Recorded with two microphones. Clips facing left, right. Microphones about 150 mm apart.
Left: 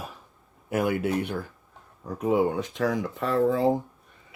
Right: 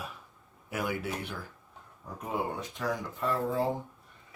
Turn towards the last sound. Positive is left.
turn(degrees=85)